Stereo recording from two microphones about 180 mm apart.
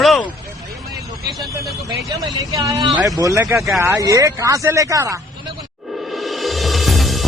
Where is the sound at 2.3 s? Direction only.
20° right (ahead or behind).